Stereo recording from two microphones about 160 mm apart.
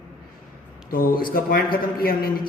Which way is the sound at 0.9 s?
65° left (ahead or behind).